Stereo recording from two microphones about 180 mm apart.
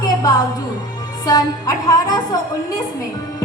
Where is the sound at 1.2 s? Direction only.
20° left (ahead or behind).